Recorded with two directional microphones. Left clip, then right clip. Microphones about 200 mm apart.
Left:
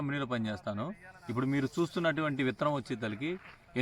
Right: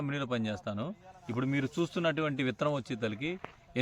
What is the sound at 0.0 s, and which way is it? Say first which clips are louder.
A man's voice: even; 15° right (ahead or behind).